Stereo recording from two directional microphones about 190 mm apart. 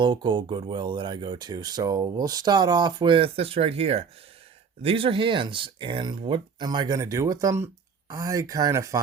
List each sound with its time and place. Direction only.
0.0 s speech: 25° right (ahead or behind)